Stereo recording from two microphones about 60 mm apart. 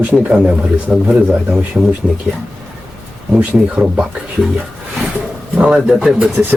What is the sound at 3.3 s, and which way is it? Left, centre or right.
Speech, centre.